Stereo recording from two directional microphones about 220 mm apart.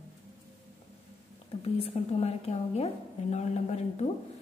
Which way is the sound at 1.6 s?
30° left (ahead or behind).